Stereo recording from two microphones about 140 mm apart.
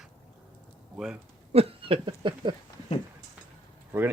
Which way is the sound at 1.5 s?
45° right (ahead or behind).